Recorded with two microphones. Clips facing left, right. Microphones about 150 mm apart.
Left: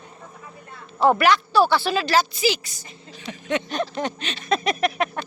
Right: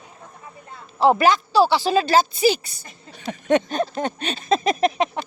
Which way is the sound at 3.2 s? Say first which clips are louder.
Right 7 dB; 45° right (ahead or behind).